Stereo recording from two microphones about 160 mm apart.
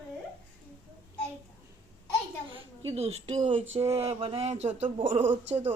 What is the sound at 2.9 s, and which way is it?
Speech, 40° right (ahead or behind).